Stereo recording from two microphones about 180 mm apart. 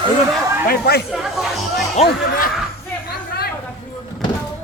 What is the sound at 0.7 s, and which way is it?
Chatter, 60° left (ahead or behind).